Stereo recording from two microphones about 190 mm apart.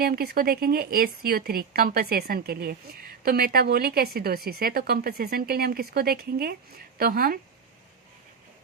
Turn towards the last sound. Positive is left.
turn(degrees=-50)  # may be behind; listen again after turning